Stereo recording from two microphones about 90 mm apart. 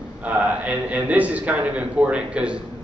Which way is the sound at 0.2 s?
15° right (ahead or behind).